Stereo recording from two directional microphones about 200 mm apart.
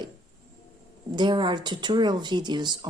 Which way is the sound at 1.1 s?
25° right (ahead or behind).